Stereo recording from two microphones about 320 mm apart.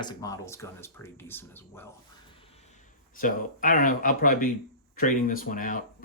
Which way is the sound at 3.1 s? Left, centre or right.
Left.